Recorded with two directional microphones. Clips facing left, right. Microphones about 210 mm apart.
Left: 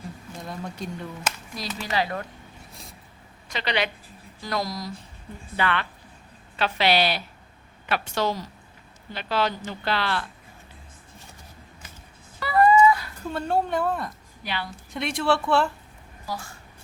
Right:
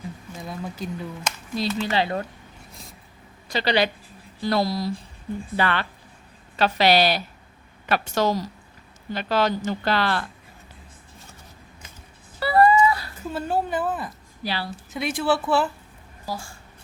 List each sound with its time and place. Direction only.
0.4 s speech: centre (ahead or behind)
1.5 s speech: 25° right (ahead or behind)
3.5 s speech: 35° right (ahead or behind)
12.4 s a sound: 35° right (ahead or behind)
13.3 s a woman's voice: 5° right (ahead or behind)
14.4 s speech: 35° right (ahead or behind)
14.9 s a woman's voice: 5° right (ahead or behind)
16.2 s a woman's voice: 30° right (ahead or behind)